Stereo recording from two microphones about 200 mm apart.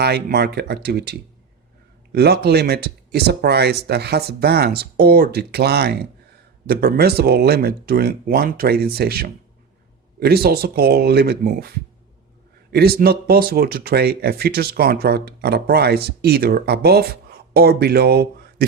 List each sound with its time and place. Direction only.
0.0 s speech: 55° right (ahead or behind)
2.1 s speech: 50° right (ahead or behind)